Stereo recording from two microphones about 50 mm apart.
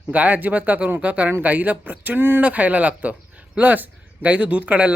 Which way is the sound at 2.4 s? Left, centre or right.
Right.